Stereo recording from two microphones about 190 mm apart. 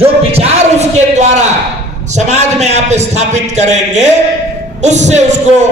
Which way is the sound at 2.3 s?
35° right (ahead or behind).